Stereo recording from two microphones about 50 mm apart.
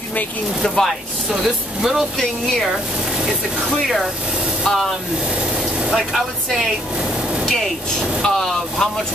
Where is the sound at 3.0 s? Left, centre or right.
Centre.